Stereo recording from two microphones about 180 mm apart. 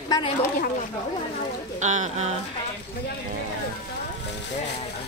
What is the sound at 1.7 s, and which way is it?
Speech, 40° right (ahead or behind).